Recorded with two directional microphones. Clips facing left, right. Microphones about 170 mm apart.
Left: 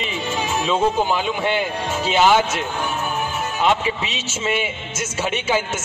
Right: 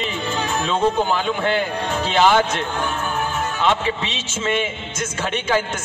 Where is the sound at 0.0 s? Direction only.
5° left (ahead or behind).